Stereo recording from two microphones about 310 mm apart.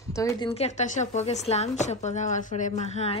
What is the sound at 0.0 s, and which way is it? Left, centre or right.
Speech, centre.